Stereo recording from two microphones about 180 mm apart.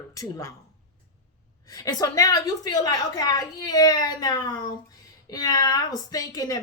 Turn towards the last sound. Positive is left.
turn(degrees=20)  # may be behind; listen again after turning